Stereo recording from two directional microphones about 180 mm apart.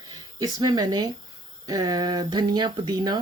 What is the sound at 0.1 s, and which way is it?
Speech, 20° right (ahead or behind).